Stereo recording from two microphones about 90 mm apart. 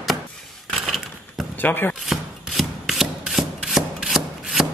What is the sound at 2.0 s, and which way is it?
Rub, centre (ahead or behind).